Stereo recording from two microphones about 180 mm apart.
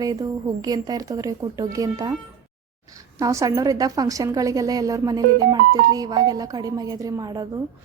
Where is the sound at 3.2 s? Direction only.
15° right (ahead or behind).